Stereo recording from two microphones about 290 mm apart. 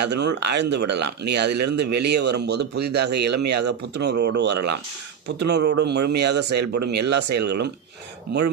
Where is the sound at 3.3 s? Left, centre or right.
Right.